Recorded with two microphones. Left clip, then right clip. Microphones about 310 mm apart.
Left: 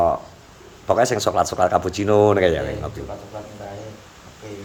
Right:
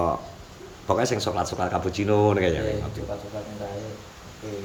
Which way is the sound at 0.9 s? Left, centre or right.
Centre.